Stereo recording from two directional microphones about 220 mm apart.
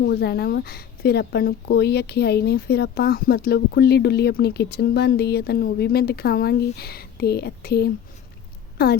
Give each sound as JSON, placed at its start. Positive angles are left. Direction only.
{"t": 0.0, "sound": "speech", "side_deg": 50}